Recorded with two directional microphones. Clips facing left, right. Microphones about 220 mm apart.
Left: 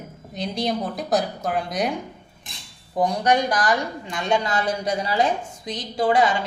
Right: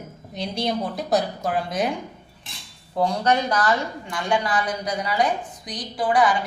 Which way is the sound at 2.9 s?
15° left (ahead or behind).